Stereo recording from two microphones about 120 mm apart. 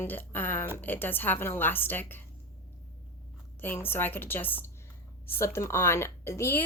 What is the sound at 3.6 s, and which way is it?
A woman's voice, 15° left (ahead or behind).